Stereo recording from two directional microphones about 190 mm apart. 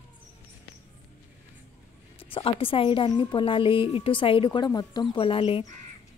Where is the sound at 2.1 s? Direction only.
30° left (ahead or behind).